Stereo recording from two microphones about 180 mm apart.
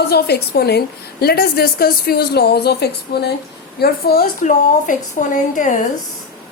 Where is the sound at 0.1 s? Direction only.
65° left (ahead or behind); by 5.8 s 45° left (ahead or behind).